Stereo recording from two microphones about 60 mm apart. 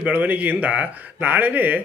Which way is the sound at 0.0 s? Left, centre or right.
Right.